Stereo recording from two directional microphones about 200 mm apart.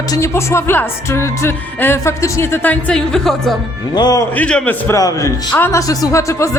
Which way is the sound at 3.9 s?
20° left (ahead or behind).